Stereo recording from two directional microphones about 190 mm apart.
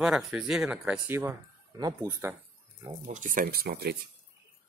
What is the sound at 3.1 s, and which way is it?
Speech, 45° right (ahead or behind).